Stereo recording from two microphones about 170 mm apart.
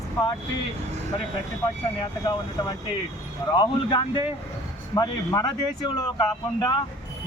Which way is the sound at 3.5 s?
25° left (ahead or behind).